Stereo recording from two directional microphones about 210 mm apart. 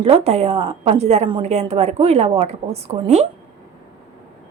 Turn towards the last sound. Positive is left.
turn(degrees=-30)  # may be behind; listen again after turning